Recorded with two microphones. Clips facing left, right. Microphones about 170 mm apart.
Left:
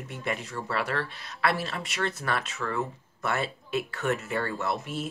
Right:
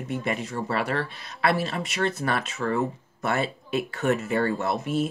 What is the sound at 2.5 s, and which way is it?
Speech, 30° right (ahead or behind).